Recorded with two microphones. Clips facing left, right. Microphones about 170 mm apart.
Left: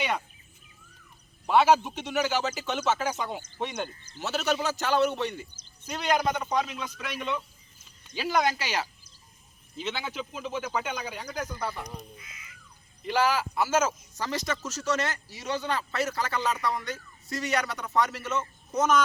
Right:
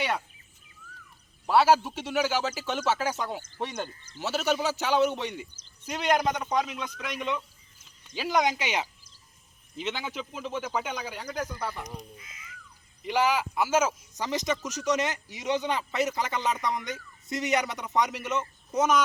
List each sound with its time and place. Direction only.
1.5 s speech: 5° right (ahead or behind)
3.5 s speech: 15° left (ahead or behind)
4.2 s a man's voice: 10° right (ahead or behind)
6.1 s speech: 5° left (ahead or behind)
8.2 s speech: 15° right (ahead or behind)
12.1 s speech: 30° right (ahead or behind)
13.1 s speech: 15° right (ahead or behind)